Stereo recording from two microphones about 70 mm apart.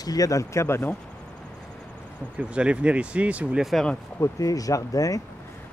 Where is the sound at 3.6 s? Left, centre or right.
Centre.